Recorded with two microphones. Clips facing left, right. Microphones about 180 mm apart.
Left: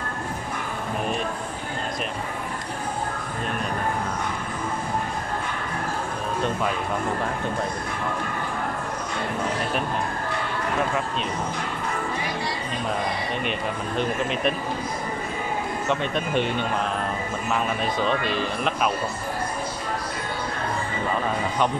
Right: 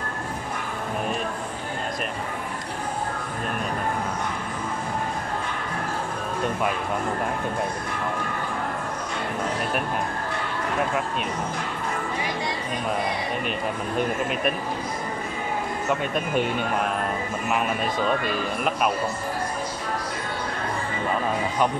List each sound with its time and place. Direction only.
13.5 s speech: 5° right (ahead or behind)
15.9 s speech: 5° right (ahead or behind)
18.0 s speech: 5° right (ahead or behind)